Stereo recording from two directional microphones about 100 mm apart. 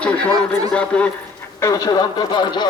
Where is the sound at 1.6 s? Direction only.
35° left (ahead or behind).